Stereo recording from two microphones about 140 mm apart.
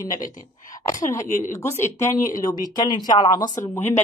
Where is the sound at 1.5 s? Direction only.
20° left (ahead or behind).